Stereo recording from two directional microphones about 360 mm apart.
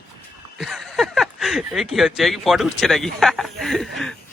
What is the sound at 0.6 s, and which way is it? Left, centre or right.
Speech, centre.